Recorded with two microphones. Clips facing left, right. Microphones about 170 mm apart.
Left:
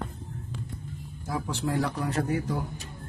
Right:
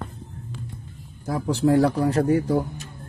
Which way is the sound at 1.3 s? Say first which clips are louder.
Right 10 dB; 40° right (ahead or behind).